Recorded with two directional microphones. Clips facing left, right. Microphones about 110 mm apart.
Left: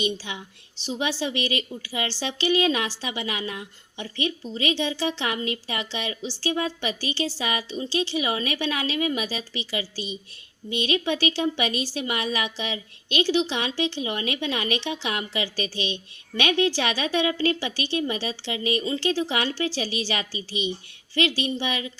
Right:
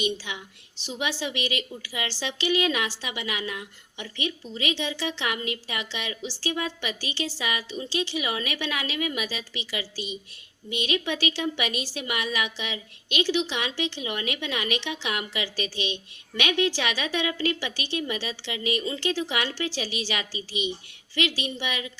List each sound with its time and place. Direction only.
0.0 s a woman's voice: 30° left (ahead or behind)